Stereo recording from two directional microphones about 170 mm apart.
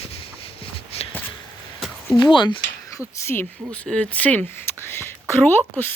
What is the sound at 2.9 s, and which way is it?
Speech, 15° left (ahead or behind).